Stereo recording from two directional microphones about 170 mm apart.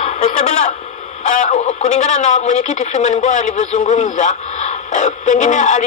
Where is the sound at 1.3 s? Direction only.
45° left (ahead or behind).